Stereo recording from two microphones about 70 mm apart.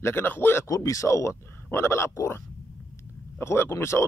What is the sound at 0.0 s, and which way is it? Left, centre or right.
Speech, left.